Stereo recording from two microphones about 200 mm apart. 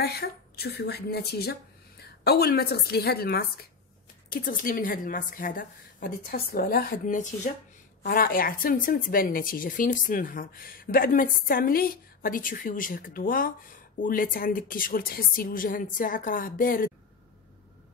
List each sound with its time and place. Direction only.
0.0 s a woman's voice: 50° left (ahead or behind)